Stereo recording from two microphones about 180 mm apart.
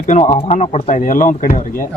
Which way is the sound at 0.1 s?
40° left (ahead or behind).